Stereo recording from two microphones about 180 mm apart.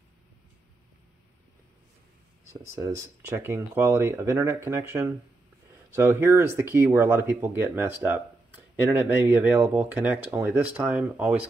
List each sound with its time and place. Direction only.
2.8 s speech: 15° right (ahead or behind)